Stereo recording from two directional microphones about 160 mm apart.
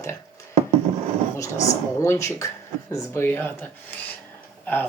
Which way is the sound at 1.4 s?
20° left (ahead or behind).